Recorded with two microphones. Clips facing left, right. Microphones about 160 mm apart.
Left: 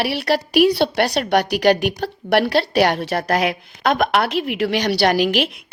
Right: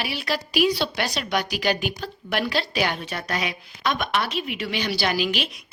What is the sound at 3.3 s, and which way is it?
A woman's voice, 60° left (ahead or behind).